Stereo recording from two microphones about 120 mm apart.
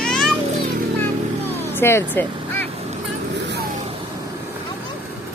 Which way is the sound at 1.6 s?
20° left (ahead or behind).